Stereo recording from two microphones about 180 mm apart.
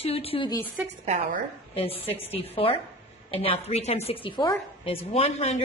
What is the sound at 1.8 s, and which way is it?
A woman's voice, 35° left (ahead or behind).